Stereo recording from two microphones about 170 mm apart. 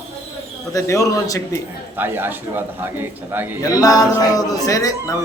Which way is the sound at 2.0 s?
10° right (ahead or behind).